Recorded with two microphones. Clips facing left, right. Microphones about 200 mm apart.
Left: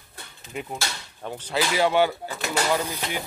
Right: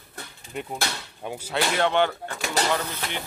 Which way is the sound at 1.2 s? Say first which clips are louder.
Even; 10° right (ahead or behind).